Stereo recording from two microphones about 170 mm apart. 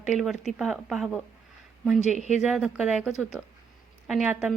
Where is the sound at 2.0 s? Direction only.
40° left (ahead or behind).